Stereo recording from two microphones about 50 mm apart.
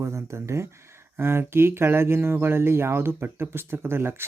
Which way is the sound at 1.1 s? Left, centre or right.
Right.